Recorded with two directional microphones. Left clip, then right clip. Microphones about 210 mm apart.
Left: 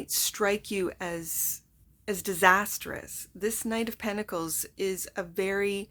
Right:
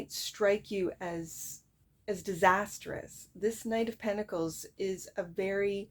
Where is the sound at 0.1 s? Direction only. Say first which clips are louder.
Left 2 dB; 30° left (ahead or behind).